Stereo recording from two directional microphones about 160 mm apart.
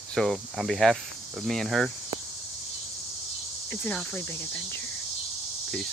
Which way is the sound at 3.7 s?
10° left (ahead or behind).